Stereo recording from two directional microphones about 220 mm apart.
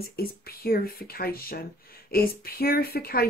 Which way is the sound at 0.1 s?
45° left (ahead or behind).